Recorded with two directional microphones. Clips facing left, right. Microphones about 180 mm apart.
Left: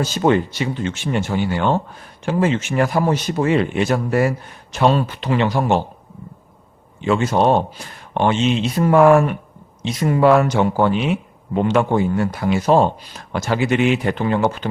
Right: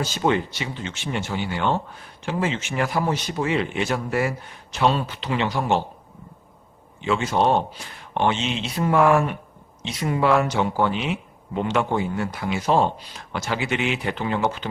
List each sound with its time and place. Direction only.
0.0 s speech: 45° left (ahead or behind)
7.0 s speech: 45° left (ahead or behind)